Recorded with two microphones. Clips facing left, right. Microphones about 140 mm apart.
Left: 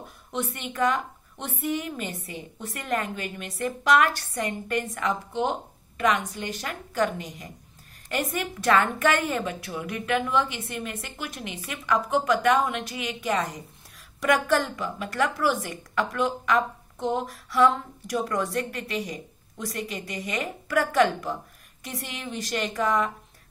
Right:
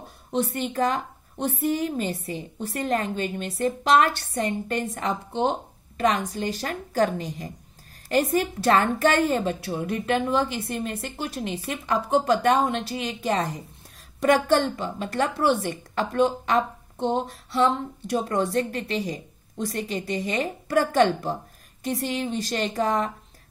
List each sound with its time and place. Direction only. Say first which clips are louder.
0.3 s a woman's voice: right 6 dB; 35° right (ahead or behind)